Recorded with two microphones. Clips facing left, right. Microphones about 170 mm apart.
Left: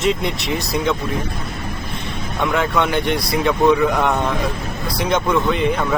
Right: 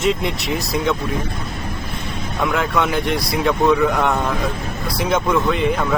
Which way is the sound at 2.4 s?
Centre (ahead or behind).